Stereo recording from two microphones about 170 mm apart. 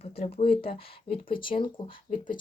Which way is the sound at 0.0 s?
35° left (ahead or behind).